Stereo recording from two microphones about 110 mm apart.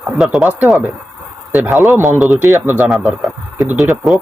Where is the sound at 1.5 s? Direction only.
20° right (ahead or behind).